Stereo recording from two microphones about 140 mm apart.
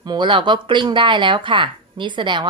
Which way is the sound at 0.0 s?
35° right (ahead or behind).